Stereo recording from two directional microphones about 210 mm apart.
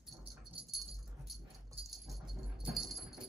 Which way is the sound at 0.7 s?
Centre (ahead or behind).